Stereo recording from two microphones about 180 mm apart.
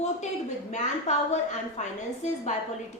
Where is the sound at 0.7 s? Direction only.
40° left (ahead or behind).